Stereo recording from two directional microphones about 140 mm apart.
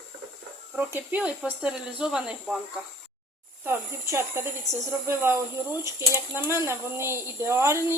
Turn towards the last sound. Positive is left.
turn(degrees=-20)  # may be behind; listen again after turning